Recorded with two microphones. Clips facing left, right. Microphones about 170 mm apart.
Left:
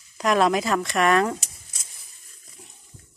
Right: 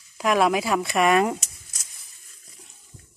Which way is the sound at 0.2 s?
5° right (ahead or behind).